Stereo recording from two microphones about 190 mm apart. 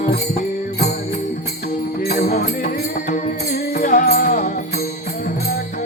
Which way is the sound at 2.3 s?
45° left (ahead or behind).